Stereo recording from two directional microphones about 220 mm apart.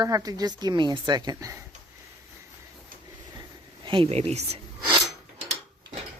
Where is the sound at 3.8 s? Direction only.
25° right (ahead or behind).